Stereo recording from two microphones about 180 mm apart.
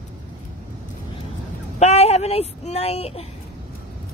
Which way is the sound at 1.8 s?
35° left (ahead or behind).